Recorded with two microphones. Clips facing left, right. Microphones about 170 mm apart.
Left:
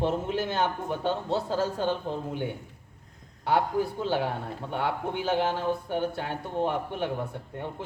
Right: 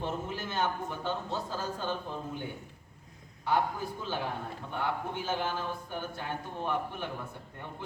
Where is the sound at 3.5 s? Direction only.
70° left (ahead or behind).